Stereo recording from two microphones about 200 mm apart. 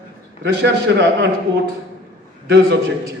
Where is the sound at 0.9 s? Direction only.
55° right (ahead or behind).